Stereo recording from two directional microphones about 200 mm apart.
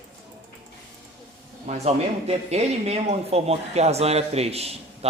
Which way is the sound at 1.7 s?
30° right (ahead or behind).